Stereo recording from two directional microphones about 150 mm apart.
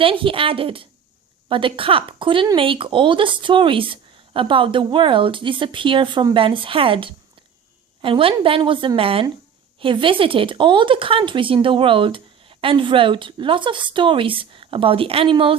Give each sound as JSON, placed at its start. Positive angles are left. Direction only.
{"t": 0.0, "sound": "speech", "side_deg": -35}